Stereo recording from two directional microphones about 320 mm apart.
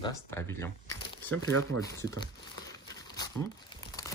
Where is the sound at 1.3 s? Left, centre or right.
Right.